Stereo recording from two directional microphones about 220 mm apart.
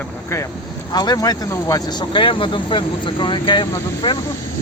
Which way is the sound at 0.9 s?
20° left (ahead or behind).